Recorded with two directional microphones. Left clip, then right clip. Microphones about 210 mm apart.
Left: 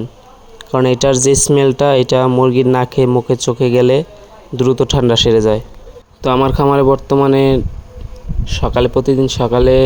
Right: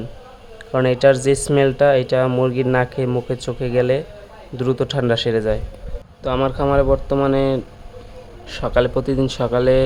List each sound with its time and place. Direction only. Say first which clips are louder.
0.6 s speech: left 2 dB; 25° left (ahead or behind)
8.4 s speech: left 3 dB; 20° left (ahead or behind)